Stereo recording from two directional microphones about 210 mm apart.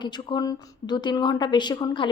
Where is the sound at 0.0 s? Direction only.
20° left (ahead or behind).